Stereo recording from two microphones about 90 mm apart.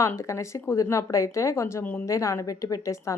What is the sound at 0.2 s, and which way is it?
A woman's voice, 35° left (ahead or behind).